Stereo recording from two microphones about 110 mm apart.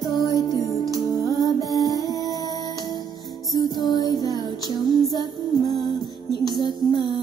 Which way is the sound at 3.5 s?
40° left (ahead or behind).